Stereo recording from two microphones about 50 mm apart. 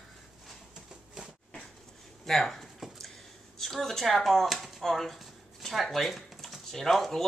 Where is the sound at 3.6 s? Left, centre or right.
Centre.